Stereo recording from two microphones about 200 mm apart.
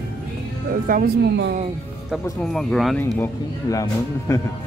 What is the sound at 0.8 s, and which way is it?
Speech, 45° right (ahead or behind).